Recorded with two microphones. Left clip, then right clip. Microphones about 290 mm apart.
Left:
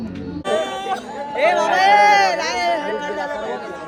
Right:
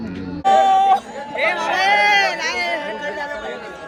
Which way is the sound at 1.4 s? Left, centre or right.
Left.